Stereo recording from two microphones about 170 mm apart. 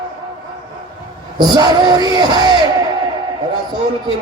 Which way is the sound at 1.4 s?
25° right (ahead or behind).